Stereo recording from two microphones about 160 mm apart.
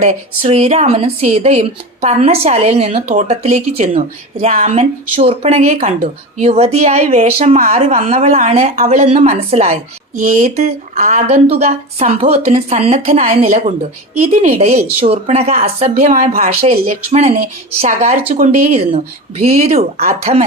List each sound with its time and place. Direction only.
0.0 s speech: 45° right (ahead or behind)
4.4 s speech: 50° right (ahead or behind)